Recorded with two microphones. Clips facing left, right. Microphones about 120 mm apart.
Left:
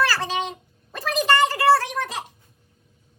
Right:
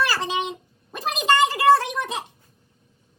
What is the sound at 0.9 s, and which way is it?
Gargling, 20° right (ahead or behind).